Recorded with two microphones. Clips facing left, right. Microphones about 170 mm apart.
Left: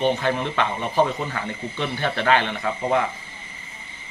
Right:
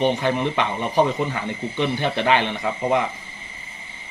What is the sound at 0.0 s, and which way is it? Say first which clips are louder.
A man's voice: right 2 dB; 15° right (ahead or behind).